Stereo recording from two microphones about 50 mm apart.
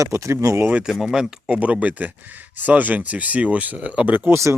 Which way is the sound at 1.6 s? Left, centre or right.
Right.